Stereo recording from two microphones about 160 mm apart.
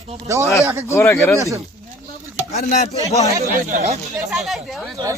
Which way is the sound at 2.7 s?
45° left (ahead or behind).